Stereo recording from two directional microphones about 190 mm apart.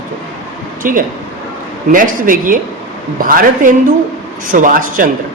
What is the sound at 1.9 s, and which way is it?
A man's voice, 45° right (ahead or behind).